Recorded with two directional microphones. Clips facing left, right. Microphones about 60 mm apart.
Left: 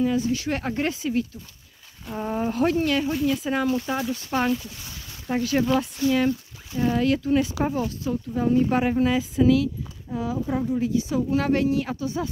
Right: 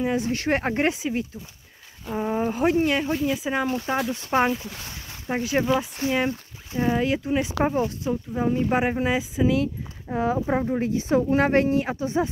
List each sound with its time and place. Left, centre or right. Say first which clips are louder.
0.0 s speech: left 1 dB; right
0.8 s speech: right 1 dB; right
3.6 s speech: even; right
9.6 s speech: even; right